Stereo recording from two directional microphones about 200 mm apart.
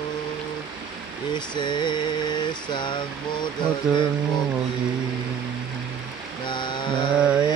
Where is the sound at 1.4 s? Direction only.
20° left (ahead or behind).